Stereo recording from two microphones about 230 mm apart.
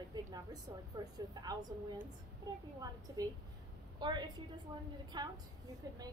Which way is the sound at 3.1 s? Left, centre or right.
Centre.